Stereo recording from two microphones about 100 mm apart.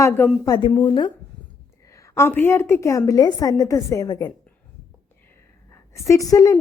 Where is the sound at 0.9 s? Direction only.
50° left (ahead or behind).